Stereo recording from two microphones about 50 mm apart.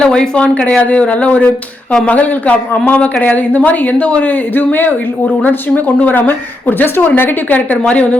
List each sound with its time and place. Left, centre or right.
0.0 s speech: centre